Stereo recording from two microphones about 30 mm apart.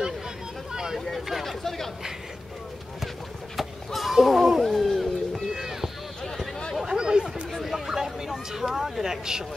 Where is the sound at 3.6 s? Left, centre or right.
Centre.